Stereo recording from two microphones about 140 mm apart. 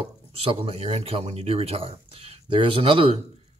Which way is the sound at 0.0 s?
40° right (ahead or behind).